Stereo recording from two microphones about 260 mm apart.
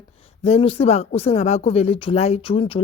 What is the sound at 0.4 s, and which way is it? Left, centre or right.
Speech, left.